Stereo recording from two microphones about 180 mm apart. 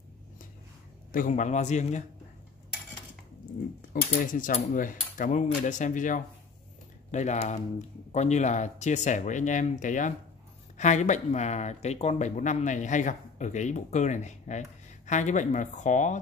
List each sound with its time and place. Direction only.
1.1 s speech: 45° left (ahead or behind)
3.9 s speech: 50° left (ahead or behind)